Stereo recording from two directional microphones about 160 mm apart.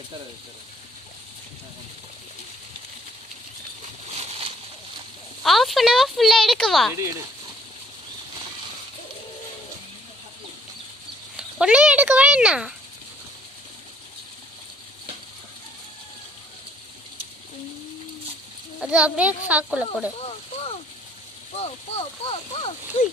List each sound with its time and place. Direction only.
5.4 s speech: centre (ahead or behind)
6.9 s speech: 20° right (ahead or behind)
11.3 s speech: 5° right (ahead or behind)
18.8 s a child's voice: 5° right (ahead or behind)
21.5 s speech: 40° left (ahead or behind)